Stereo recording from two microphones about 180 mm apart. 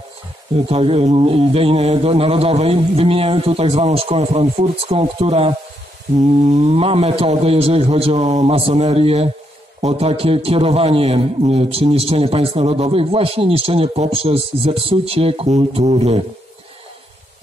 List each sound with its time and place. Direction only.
0.7 s a man's voice: 30° right (ahead or behind)